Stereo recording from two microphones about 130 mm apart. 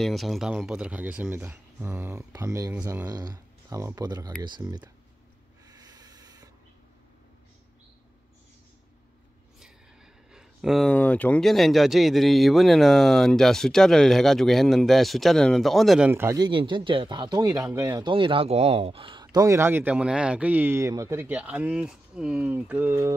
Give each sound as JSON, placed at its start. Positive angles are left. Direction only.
{"t": 0.0, "sound": "speech", "side_deg": 0}
{"t": 5.7, "sound": "sanding", "side_deg": -30}
{"t": 10.3, "sound": "a sound", "side_deg": 0}
{"t": 10.9, "sound": "speech", "side_deg": 10}
{"t": 16.1, "sound": "speech", "side_deg": -15}
{"t": 16.3, "sound": "speech", "side_deg": -35}
{"t": 18.0, "sound": "speech", "side_deg": -40}
{"t": 19.4, "sound": "speech", "side_deg": -20}